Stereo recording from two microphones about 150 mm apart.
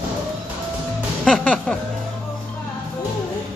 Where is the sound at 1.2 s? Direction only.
5° left (ahead or behind).